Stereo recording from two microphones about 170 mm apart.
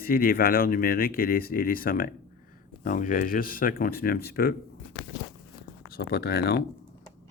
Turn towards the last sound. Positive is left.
turn(degrees=65)  # may be behind; listen again after turning